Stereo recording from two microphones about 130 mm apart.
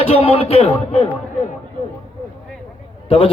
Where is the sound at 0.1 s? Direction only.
45° left (ahead or behind).